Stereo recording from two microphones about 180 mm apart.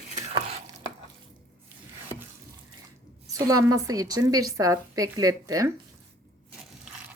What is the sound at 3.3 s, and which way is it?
Speech, 20° right (ahead or behind).